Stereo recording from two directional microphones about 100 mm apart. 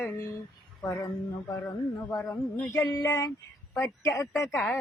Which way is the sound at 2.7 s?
35° left (ahead or behind).